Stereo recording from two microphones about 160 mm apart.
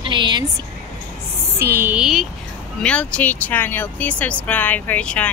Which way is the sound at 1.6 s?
15° right (ahead or behind).